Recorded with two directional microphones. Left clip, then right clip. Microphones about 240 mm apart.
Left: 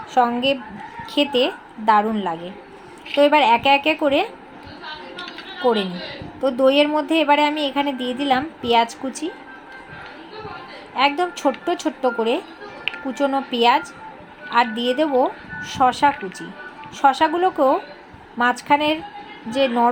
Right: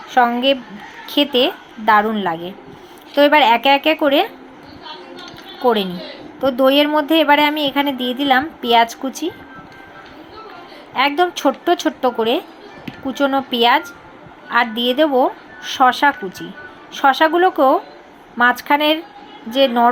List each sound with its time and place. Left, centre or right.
0.1 s a woman's voice: centre
5.6 s a woman's voice: centre
10.9 s a woman's voice: centre